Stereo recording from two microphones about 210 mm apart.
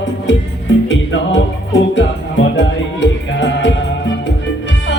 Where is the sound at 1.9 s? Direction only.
60° left (ahead or behind).